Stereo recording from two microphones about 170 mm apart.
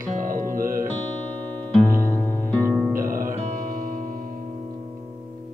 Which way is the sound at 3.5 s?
55° right (ahead or behind).